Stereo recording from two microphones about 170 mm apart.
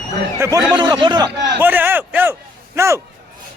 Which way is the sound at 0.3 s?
15° right (ahead or behind).